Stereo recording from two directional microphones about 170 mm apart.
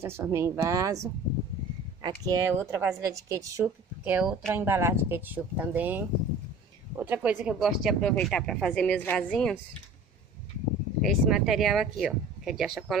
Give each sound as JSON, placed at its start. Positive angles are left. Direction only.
{"t": 0.0, "sound": "speech", "side_deg": -15}
{"t": 2.0, "sound": "speech", "side_deg": -20}
{"t": 4.5, "sound": "speech", "side_deg": -15}
{"t": 11.0, "sound": "speech", "side_deg": 0}